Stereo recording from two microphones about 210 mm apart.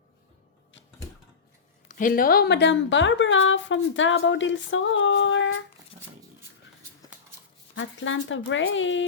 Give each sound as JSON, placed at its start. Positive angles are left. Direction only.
{"t": 1.9, "sound": "a woman's voice", "side_deg": 40}
{"t": 7.8, "sound": "a woman's voice", "side_deg": 65}